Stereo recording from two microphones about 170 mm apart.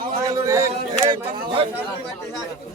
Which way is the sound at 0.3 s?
20° right (ahead or behind).